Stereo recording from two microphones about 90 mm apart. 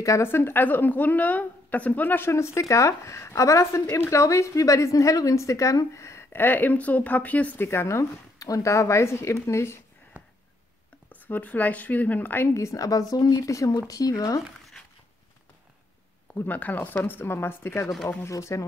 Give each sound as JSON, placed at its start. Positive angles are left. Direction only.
{"t": 0.0, "sound": "a woman's voice", "side_deg": 30}
{"t": 11.1, "sound": "a woman's voice", "side_deg": 20}
{"t": 12.5, "sound": "a woman's voice", "side_deg": 35}
{"t": 16.3, "sound": "a woman's voice", "side_deg": 20}